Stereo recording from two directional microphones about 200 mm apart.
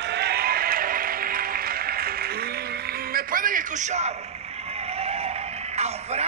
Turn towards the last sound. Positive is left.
turn(degrees=-30)  # may be behind; listen again after turning